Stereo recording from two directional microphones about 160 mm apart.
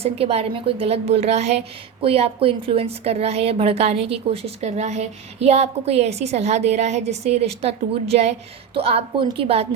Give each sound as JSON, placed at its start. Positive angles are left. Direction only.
{"t": 0.0, "sound": "a woman's voice", "side_deg": -40}